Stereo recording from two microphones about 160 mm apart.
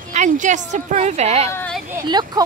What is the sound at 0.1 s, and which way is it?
A woman's voice, 50° right (ahead or behind).